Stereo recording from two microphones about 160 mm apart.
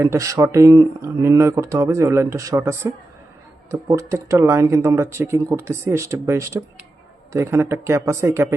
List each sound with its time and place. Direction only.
0.0 s speech: 20° right (ahead or behind)